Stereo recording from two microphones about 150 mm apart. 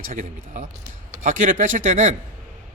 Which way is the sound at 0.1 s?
60° right (ahead or behind).